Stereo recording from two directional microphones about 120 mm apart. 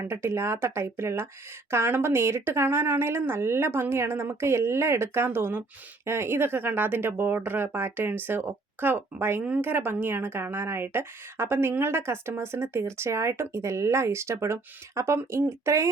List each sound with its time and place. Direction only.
0.1 s speech: 20° right (ahead or behind)